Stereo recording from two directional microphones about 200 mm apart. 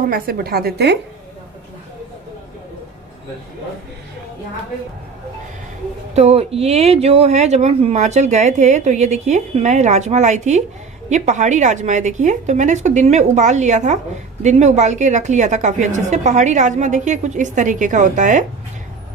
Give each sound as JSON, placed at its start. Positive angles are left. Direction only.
{"t": 0.0, "sound": "a woman's voice", "side_deg": -50}
{"t": 6.1, "sound": "speech", "side_deg": -30}